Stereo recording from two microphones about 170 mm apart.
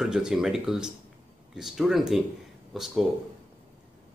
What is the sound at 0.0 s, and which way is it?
Speech, 5° right (ahead or behind).